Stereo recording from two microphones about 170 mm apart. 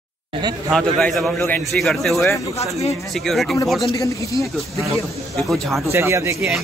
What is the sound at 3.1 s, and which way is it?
Speech, centre (ahead or behind).